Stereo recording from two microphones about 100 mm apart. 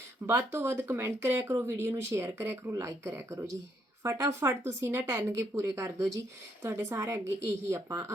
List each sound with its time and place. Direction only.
0.3 s speech: 25° right (ahead or behind)